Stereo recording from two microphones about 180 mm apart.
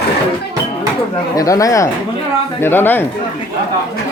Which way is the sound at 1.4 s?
20° left (ahead or behind).